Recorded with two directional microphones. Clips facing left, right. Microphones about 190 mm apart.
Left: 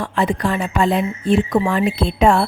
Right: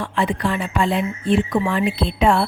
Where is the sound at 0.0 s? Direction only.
40° left (ahead or behind).